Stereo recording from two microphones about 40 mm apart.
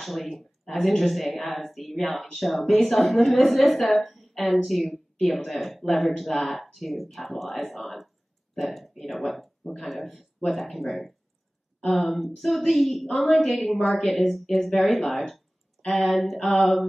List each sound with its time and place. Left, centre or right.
0.0 s speech: centre